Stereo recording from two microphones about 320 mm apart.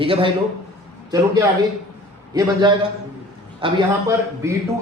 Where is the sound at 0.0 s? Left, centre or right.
Centre.